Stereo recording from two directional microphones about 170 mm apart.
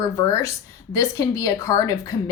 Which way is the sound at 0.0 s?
15° left (ahead or behind).